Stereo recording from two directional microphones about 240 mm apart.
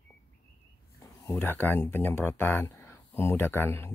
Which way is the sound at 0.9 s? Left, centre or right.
Centre.